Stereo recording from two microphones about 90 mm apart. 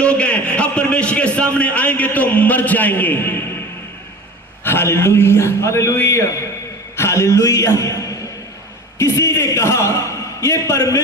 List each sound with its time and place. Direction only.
0.0 s a man's voice: 10° left (ahead or behind)
4.6 s a man's voice: 25° left (ahead or behind)